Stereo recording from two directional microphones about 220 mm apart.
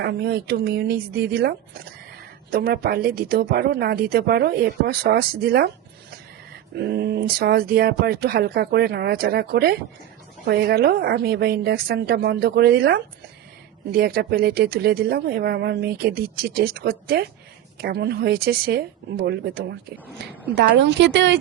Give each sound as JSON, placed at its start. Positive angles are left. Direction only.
{"t": 0.0, "sound": "a woman's voice", "side_deg": -50}